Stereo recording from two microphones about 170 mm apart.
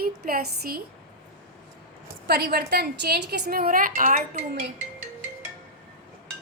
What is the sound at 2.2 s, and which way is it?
A woman's voice, 70° right (ahead or behind).